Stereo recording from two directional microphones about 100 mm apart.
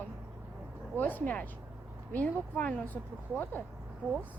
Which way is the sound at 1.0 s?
20° left (ahead or behind).